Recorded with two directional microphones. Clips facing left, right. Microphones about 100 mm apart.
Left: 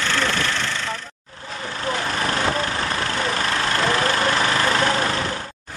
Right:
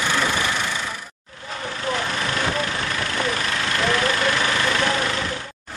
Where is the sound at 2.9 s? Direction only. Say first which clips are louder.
Left 1 dB; 35° left (ahead or behind).